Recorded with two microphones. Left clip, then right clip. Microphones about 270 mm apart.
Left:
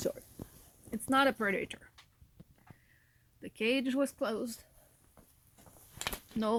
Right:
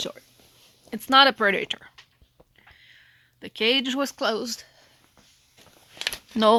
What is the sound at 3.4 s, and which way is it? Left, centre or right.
Speech, centre.